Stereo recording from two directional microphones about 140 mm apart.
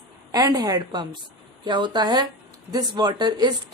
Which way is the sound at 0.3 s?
25° right (ahead or behind).